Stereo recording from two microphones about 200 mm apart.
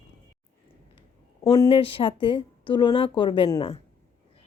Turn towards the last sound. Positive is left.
turn(degrees=25)  # may be behind; listen again after turning